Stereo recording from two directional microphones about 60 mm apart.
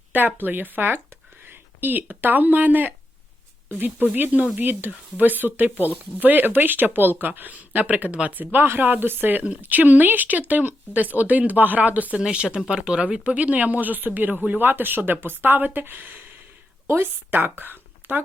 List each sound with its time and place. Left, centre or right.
0.1 s speech: right
12.1 s speech: centre; by 16.1 s right
16.8 s a woman's voice: right
17.6 s a sound: right